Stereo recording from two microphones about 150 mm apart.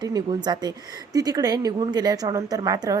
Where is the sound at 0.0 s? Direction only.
30° right (ahead or behind).